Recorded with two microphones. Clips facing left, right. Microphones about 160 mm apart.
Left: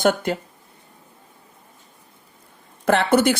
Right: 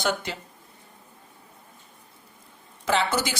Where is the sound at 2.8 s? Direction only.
55° left (ahead or behind).